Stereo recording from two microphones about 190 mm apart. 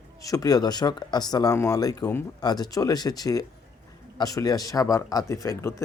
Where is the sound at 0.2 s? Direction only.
20° left (ahead or behind).